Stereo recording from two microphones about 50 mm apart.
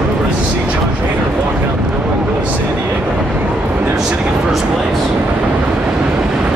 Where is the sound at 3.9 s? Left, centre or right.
Centre.